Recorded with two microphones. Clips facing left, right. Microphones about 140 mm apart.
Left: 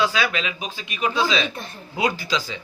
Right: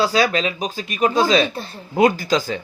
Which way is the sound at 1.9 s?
45° right (ahead or behind).